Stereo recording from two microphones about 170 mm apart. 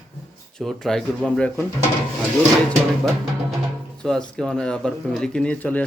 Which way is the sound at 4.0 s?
5° left (ahead or behind).